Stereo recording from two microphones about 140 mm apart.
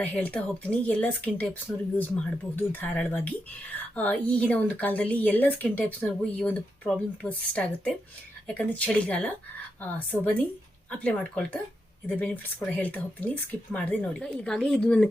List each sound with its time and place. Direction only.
0.0 s speech: 10° left (ahead or behind)